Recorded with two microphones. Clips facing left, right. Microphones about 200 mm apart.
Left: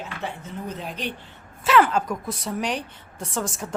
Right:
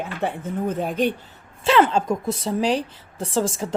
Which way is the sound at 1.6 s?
25° right (ahead or behind).